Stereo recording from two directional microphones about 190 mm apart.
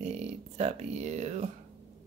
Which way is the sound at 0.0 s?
35° right (ahead or behind).